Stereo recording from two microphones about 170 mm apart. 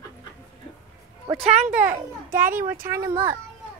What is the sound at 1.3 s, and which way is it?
Speech, 35° right (ahead or behind).